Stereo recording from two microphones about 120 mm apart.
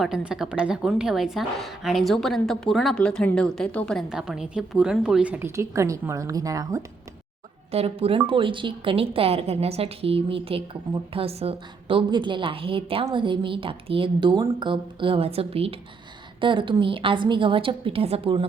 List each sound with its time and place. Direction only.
0.0 s a woman's voice: 5° right (ahead or behind); by 4.0 s 10° left (ahead or behind)
4.1 s a woman's voice: 5° right (ahead or behind)
5.5 s a woman's voice: 25° right (ahead or behind)
7.7 s a woman's voice: 55° right (ahead or behind)
16.4 s a woman's voice: 45° right (ahead or behind)